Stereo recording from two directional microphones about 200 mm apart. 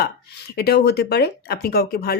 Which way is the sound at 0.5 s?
50° left (ahead or behind).